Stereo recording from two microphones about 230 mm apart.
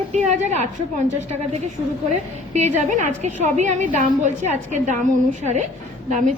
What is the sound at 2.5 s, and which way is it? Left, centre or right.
A woman's voice, right.